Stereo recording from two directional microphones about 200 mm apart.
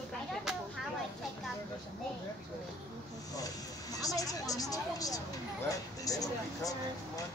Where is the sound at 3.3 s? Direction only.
15° left (ahead or behind).